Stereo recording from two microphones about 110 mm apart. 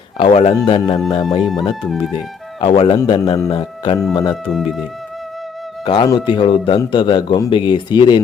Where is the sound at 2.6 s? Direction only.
50° left (ahead or behind).